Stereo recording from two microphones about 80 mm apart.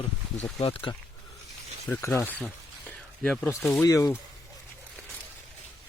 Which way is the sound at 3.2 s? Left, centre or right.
Centre.